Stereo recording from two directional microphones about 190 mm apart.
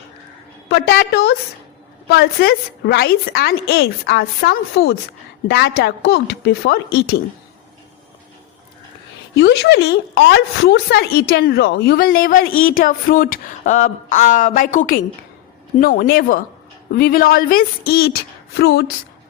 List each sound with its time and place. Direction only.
0.7 s a woman's voice: 60° left (ahead or behind)
2.4 s a woman's voice: 60° left (ahead or behind)
9.3 s a woman's voice: 65° left (ahead or behind)